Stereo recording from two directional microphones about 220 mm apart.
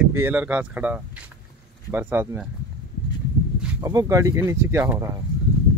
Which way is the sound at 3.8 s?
15° right (ahead or behind).